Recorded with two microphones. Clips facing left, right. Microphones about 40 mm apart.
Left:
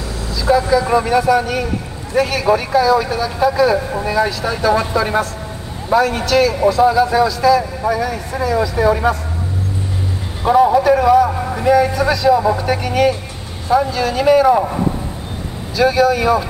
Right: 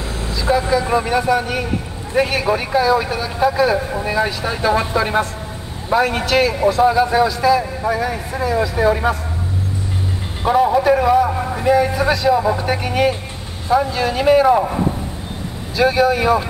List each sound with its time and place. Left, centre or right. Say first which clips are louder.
0.4 s speech: left 3 dB; right
0.8 s speech: left 3 dB; centre
10.4 s speech: left 3 dB; centre
11.2 s a sound: left 1 dB; centre
11.7 s speech: left 2 dB; centre
14.5 s a man's voice: left 1 dB; centre
15.8 s speech: left 1 dB; centre